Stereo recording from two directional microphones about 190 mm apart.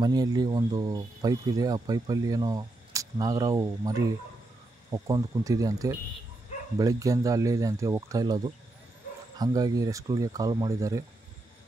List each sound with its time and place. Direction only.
0.0 s speech: 20° right (ahead or behind)
4.9 s speech: 20° right (ahead or behind)
9.4 s speech: 20° right (ahead or behind)